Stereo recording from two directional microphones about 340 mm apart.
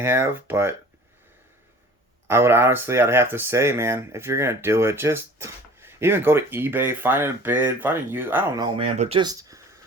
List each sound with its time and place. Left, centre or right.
0.0 s speech: centre
2.2 s speech: centre